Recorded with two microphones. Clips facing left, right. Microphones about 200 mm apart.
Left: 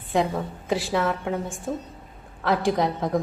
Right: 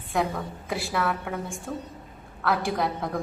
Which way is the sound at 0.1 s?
25° left (ahead or behind).